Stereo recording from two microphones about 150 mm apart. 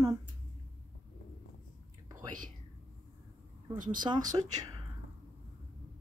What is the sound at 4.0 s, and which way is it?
Speech, 25° right (ahead or behind).